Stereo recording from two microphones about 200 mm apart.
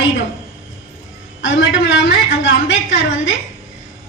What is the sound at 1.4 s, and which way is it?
A woman's voice, 70° left (ahead or behind).